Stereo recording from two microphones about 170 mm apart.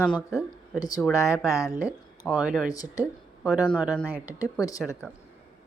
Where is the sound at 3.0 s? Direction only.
10° right (ahead or behind).